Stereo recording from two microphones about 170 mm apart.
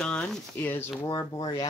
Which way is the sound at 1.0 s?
25° left (ahead or behind).